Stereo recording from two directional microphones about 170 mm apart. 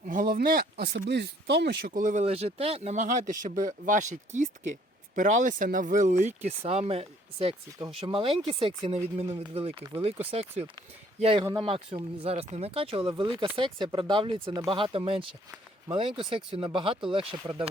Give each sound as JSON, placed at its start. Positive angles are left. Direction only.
{"t": 0.1, "sound": "speech", "side_deg": -55}
{"t": 1.9, "sound": "speech", "side_deg": -45}